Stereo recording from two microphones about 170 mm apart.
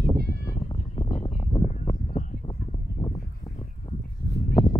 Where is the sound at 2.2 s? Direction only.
45° left (ahead or behind).